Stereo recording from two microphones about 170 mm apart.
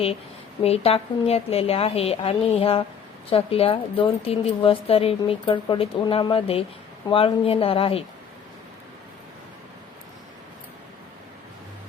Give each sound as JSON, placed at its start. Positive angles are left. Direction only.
{"t": 0.6, "sound": "a woman's voice", "side_deg": 35}